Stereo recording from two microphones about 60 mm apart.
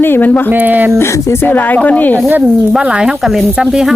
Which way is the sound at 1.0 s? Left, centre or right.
Left.